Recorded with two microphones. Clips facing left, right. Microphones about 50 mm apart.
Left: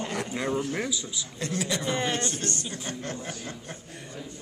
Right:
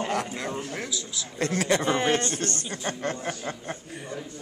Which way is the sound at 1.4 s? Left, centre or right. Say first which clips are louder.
Right 6 dB; right.